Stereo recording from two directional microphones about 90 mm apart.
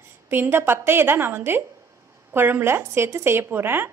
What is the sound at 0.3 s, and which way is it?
A woman's voice, 25° right (ahead or behind).